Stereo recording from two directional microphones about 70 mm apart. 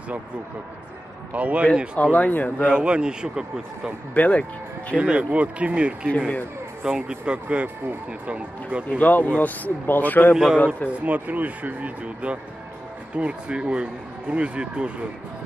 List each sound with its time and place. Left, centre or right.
1.3 s speech: centre
2.1 s speech: left
2.6 s speech: centre
4.1 s speech: left
4.9 s speech: centre
6.1 s speech: centre
6.8 s speech: centre
8.8 s speech: left
10.3 s a man's voice: centre
10.9 s speech: right